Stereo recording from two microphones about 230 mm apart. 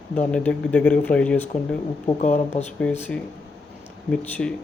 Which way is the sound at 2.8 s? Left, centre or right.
Centre.